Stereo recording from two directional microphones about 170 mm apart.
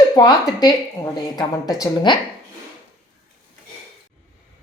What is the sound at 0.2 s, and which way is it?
A woman's voice, 25° left (ahead or behind).